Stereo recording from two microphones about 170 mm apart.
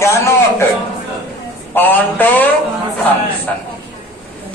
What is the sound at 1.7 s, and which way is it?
Speech, 10° left (ahead or behind).